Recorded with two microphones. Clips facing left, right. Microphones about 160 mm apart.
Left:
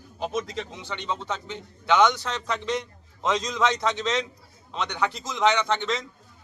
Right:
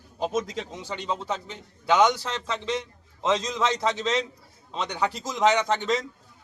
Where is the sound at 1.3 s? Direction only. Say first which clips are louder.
Right 1 dB; 35° right (ahead or behind).